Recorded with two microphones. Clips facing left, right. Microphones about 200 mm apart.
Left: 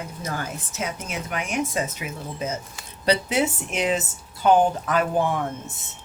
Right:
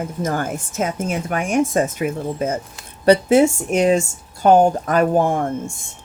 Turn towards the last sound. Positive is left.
turn(degrees=-45)  # may be behind; listen again after turning